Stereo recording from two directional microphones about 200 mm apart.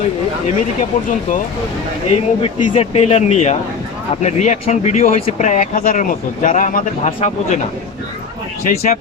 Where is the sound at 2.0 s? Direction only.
30° left (ahead or behind).